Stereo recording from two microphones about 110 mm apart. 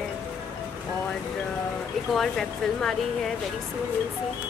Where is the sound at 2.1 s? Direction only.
5° left (ahead or behind).